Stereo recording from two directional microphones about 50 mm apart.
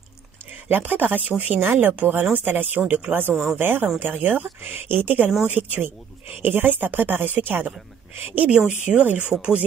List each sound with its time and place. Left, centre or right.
0.7 s speech: right
8.4 s speech: right